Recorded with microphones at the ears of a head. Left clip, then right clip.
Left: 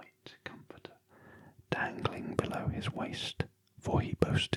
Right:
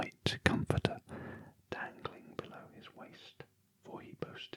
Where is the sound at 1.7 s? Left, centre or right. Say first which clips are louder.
Left 8 dB; left.